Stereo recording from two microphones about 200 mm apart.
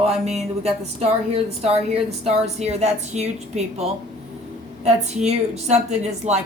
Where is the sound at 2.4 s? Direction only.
35° right (ahead or behind).